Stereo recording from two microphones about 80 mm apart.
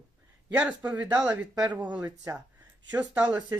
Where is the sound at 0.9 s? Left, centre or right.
Centre.